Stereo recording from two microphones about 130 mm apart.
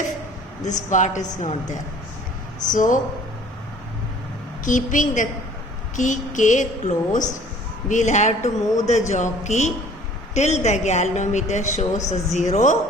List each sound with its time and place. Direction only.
0.6 s a woman's voice: 70° left (ahead or behind)
2.6 s a woman's voice: 80° left
4.6 s a woman's voice: 80° left; by 12.7 s 65° left (ahead or behind)